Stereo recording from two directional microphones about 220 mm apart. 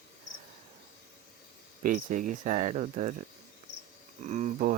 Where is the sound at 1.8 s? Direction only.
40° right (ahead or behind).